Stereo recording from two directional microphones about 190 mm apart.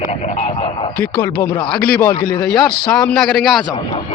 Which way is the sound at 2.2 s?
25° left (ahead or behind).